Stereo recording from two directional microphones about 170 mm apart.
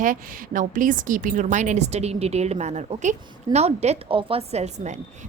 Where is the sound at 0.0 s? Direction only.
50° right (ahead or behind).